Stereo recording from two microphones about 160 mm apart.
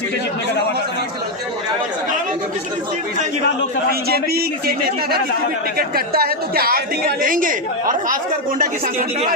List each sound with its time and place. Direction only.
4.1 s a man's voice: 75° right (ahead or behind)
5.7 s a woman's voice: 70° right (ahead or behind)